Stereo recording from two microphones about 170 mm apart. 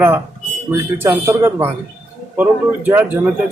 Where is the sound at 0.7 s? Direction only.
15° right (ahead or behind).